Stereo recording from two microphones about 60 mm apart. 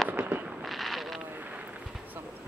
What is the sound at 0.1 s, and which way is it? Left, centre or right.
Fireworks, right.